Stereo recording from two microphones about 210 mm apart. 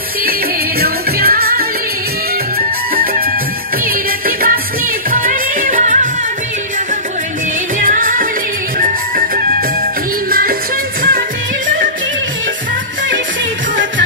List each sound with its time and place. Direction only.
0.7 s music: 45° right (ahead or behind)
3.8 s music: 40° right (ahead or behind)
7.8 s music: 40° right (ahead or behind)
11.0 s music: 45° right (ahead or behind)